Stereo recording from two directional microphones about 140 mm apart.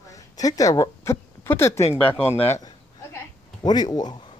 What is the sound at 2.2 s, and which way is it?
Speech, 45° left (ahead or behind).